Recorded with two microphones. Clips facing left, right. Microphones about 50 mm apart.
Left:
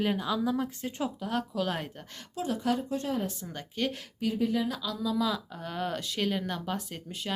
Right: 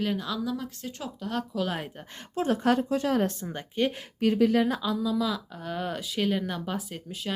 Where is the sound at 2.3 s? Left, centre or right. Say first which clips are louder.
Right 5 dB; right.